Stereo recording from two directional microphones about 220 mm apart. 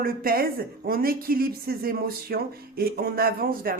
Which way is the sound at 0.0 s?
40° right (ahead or behind).